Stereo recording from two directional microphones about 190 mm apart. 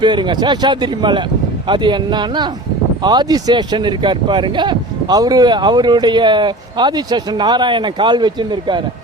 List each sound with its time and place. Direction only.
0.0 s speech: 25° right (ahead or behind)